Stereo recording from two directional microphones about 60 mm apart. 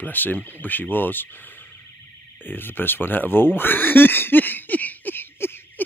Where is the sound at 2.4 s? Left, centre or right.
Left.